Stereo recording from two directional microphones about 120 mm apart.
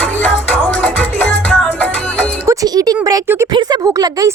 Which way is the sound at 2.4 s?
30° right (ahead or behind).